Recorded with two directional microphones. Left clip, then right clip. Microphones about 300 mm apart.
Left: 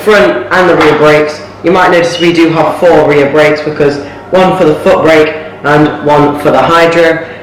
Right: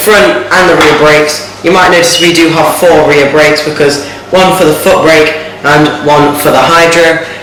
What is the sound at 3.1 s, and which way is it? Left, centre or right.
Speech, centre.